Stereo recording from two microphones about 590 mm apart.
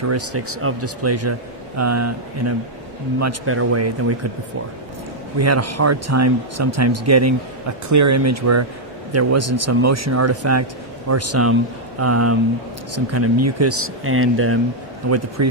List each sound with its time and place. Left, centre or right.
0.1 s speech: right
5.4 s speech: right